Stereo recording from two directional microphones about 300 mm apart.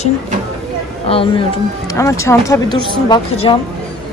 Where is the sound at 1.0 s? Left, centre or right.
Centre.